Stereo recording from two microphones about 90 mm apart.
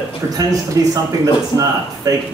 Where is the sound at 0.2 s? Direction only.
40° right (ahead or behind).